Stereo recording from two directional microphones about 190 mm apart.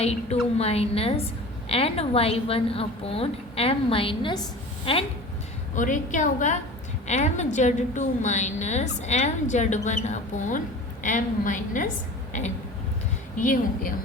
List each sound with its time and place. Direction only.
0.0 s a woman's voice: 35° left (ahead or behind)
5.7 s a woman's voice: 45° left (ahead or behind)
13.3 s a woman's voice: 45° left (ahead or behind)